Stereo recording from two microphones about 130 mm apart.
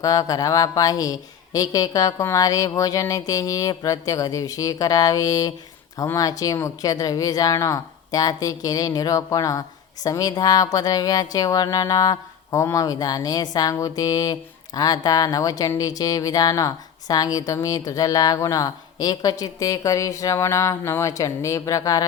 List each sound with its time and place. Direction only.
0.0 s speech: 25° left (ahead or behind)